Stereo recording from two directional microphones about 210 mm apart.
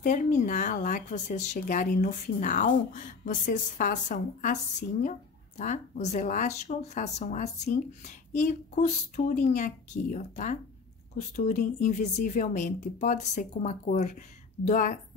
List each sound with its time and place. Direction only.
0.0 s speech: 35° left (ahead or behind)
5.6 s speech: 35° left (ahead or behind)